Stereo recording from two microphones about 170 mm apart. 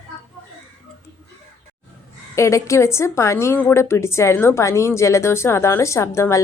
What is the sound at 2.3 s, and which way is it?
A woman's voice, 15° left (ahead or behind).